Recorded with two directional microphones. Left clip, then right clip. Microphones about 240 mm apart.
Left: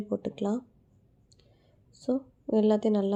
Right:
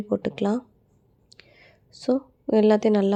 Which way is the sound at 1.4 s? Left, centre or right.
Right.